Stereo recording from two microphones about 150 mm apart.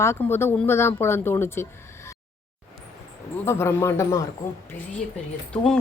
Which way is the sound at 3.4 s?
15° left (ahead or behind).